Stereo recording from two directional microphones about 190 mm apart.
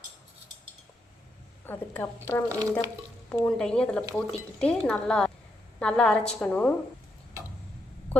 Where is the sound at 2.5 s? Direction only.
15° right (ahead or behind).